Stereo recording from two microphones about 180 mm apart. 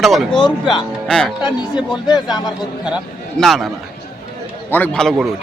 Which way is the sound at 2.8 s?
Centre (ahead or behind).